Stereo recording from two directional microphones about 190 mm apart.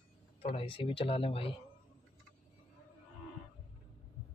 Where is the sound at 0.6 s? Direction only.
30° left (ahead or behind).